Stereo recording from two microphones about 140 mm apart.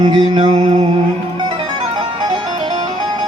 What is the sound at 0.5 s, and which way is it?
Music, 45° right (ahead or behind).